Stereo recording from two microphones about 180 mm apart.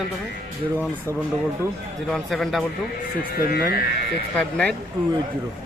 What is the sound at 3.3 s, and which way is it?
Speech, 55° left (ahead or behind).